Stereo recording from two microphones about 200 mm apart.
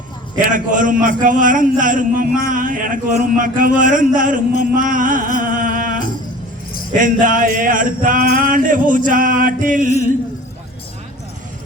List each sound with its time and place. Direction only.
0.5 s a man's voice: 40° right (ahead or behind)
7.0 s a man's voice: 40° right (ahead or behind)